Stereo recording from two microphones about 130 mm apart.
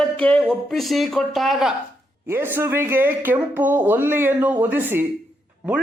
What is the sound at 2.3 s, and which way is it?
Speech, 15° right (ahead or behind).